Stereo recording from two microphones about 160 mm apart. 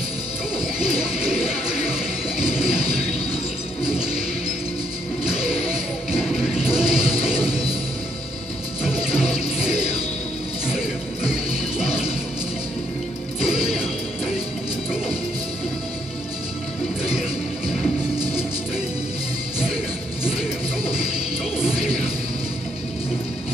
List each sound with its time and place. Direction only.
0.7 s bird: 5° right (ahead or behind)
5.7 s music: 5° right (ahead or behind)
7.0 s music: 35° left (ahead or behind)
8.8 s music: 5° right (ahead or behind)